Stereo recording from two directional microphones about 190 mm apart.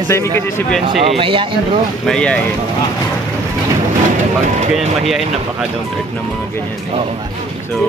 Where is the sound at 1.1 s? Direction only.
30° right (ahead or behind).